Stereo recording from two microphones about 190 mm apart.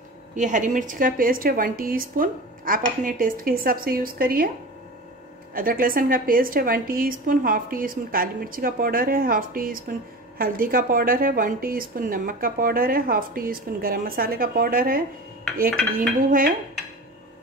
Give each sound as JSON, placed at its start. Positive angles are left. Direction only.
{"t": 0.4, "sound": "a woman's voice", "side_deg": -40}
{"t": 5.5, "sound": "a woman's voice", "side_deg": -50}
{"t": 16.3, "sound": "a woman's voice", "side_deg": -45}